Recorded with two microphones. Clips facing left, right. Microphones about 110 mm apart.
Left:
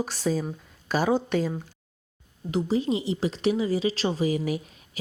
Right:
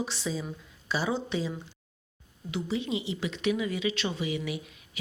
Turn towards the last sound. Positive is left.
turn(degrees=40)  # may be behind; listen again after turning